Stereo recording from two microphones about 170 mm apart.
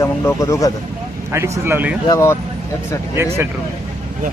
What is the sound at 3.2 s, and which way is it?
Speech, 15° right (ahead or behind).